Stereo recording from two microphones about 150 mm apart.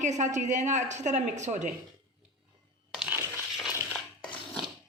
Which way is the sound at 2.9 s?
5° right (ahead or behind).